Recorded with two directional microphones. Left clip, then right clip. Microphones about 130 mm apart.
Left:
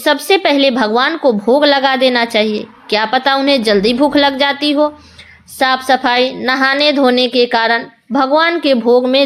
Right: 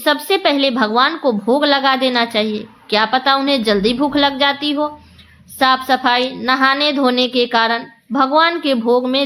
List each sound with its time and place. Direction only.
0.0 s a woman's voice: 40° left (ahead or behind)